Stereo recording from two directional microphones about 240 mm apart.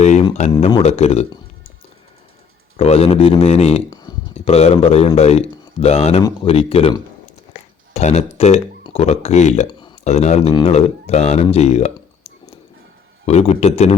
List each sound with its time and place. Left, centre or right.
0.0 s a sound: left
0.5 s a man's voice: left
2.7 s a man's voice: left
11.4 s clicking: left
13.2 s a man's voice: left